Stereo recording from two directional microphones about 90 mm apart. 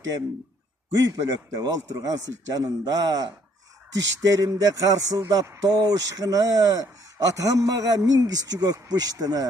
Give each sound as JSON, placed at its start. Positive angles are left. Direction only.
{"t": 1.1, "sound": "speech", "side_deg": -45}